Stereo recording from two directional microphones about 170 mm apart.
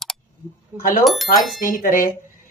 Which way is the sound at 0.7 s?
10° right (ahead or behind).